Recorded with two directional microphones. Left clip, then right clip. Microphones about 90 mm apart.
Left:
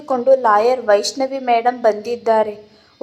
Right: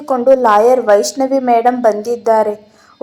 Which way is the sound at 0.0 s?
20° right (ahead or behind).